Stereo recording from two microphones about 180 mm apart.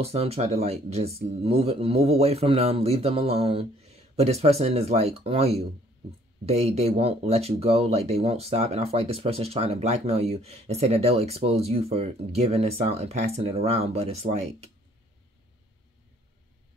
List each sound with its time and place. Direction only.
0.0 s speech: 35° right (ahead or behind)